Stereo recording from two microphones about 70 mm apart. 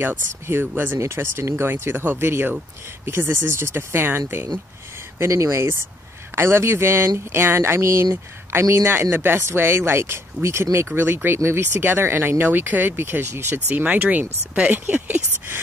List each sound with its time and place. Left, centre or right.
0.5 s speech: right
5.2 s speech: right
13.7 s speech: right